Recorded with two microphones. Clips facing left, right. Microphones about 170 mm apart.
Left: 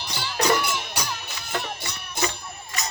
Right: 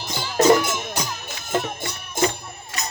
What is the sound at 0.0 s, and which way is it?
Music, 45° right (ahead or behind).